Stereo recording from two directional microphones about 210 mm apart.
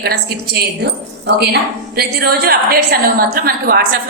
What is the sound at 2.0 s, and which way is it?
A woman's voice, 50° right (ahead or behind).